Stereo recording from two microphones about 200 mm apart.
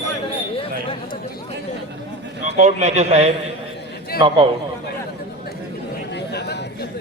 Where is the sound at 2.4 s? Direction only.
35° right (ahead or behind).